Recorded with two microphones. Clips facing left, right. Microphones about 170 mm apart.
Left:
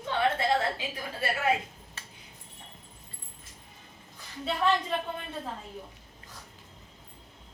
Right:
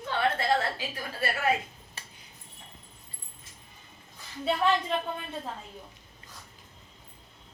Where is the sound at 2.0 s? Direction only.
15° right (ahead or behind).